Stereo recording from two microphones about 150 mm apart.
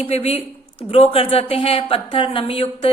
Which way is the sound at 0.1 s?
40° left (ahead or behind).